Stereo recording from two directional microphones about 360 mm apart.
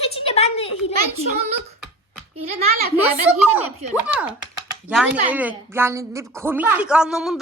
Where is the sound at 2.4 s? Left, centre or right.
Centre.